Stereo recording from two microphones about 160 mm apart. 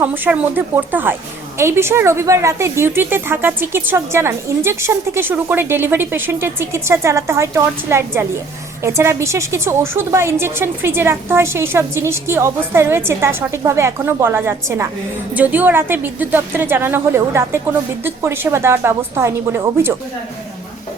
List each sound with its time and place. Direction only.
0.0 s a woman's voice: 10° right (ahead or behind)